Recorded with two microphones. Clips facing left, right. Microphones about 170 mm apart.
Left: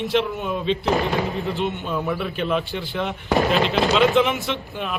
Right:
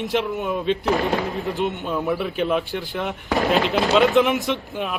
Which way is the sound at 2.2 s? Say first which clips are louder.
Right 2 dB; 15° right (ahead or behind).